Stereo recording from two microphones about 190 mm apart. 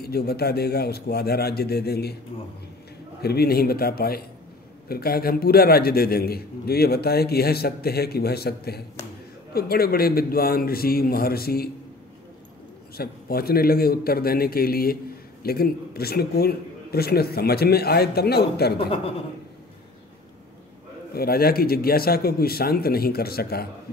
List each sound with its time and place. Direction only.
0.0 s a man's voice: 55° left (ahead or behind)
3.2 s a man's voice: 55° left (ahead or behind)
12.9 s a man's voice: 55° left (ahead or behind)
21.1 s a man's voice: 55° left (ahead or behind)